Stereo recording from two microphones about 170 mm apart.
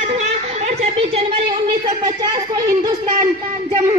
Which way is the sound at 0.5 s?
40° right (ahead or behind).